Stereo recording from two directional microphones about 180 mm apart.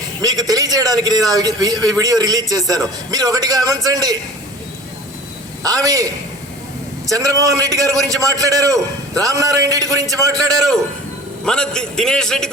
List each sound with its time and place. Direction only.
0.2 s a man's voice: 20° right (ahead or behind)
5.6 s a man's voice: 20° right (ahead or behind)
10.5 s a man's voice: 5° left (ahead or behind)